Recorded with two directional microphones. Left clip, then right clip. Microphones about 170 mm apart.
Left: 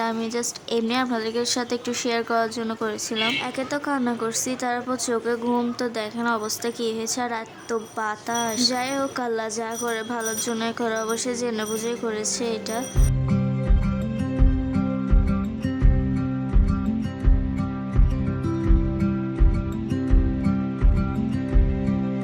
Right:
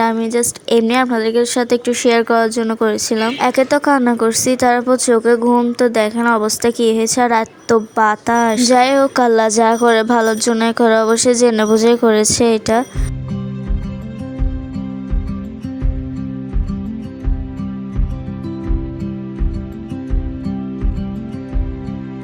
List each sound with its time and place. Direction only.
0.0 s a woman's voice: 35° right (ahead or behind)